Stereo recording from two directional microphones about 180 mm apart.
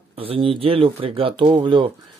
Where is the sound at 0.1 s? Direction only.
30° right (ahead or behind).